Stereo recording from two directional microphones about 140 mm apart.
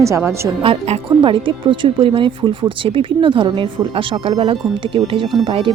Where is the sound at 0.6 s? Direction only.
40° right (ahead or behind).